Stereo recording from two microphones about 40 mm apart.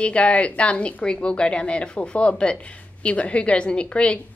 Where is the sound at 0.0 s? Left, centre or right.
Left.